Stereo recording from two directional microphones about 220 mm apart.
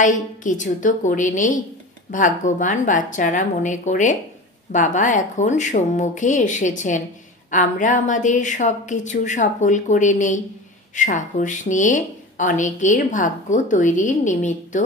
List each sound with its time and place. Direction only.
0.0 s a woman's voice: 35° left (ahead or behind)